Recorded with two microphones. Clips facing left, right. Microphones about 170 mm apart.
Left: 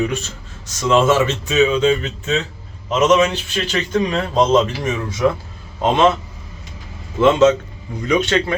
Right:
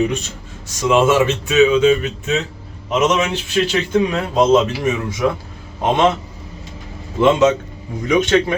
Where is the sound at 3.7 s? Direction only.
10° right (ahead or behind).